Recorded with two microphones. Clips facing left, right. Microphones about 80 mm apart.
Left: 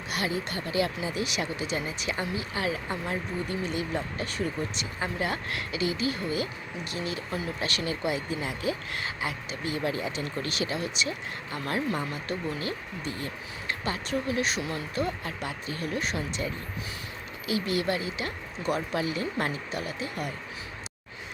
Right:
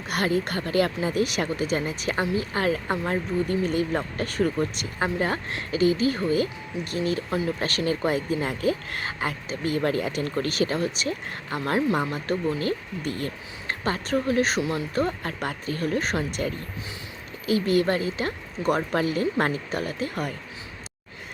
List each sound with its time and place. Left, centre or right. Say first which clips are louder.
0.1 s speech: right 6 dB; right
11.6 s speech: right 6 dB; right
11.9 s speech: right 6 dB; right
17.5 s speech: right 6 dB; right